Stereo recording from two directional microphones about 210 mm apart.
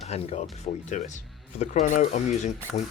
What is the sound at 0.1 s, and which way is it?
Speech, 30° left (ahead or behind).